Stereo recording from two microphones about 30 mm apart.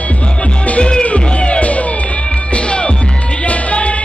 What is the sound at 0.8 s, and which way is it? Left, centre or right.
Music, left.